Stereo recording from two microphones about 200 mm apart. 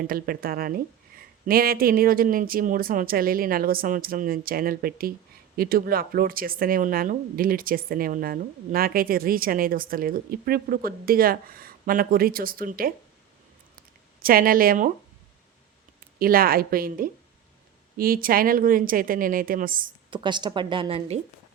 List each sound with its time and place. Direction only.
0.0 s speech: 45° right (ahead or behind)
13.7 s a sound: 45° right (ahead or behind)
16.1 s speech: 45° right (ahead or behind)
20.1 s a woman's voice: 25° right (ahead or behind)